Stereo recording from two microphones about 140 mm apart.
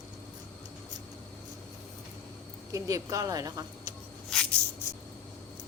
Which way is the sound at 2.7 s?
25° right (ahead or behind).